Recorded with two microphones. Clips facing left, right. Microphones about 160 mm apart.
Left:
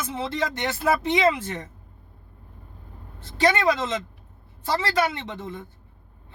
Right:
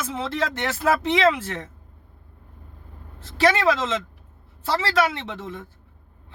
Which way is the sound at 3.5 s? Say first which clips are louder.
Right 1 dB; 90° right.